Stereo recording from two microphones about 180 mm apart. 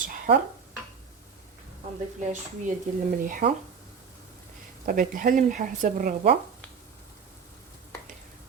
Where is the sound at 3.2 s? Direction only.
50° right (ahead or behind).